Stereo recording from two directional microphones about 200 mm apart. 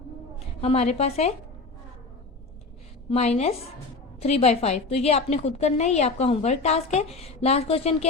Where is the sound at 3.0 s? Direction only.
30° left (ahead or behind).